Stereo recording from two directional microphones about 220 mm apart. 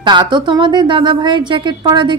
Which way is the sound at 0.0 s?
20° right (ahead or behind).